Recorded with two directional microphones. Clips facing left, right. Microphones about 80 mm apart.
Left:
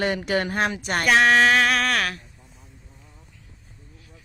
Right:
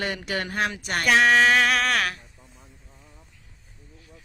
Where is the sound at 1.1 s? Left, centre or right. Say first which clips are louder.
Left 1 dB; centre.